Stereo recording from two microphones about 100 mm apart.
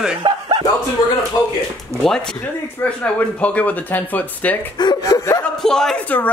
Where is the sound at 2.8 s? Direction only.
15° left (ahead or behind).